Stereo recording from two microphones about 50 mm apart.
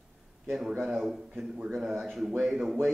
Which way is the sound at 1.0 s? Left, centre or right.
Centre.